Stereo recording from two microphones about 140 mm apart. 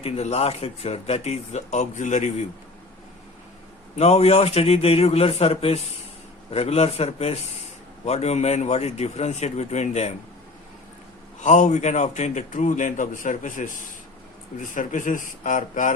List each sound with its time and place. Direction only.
0.0 s a man's voice: 45° left (ahead or behind)
3.9 s a man's voice: 50° left (ahead or behind)
11.3 s a man's voice: 60° left (ahead or behind)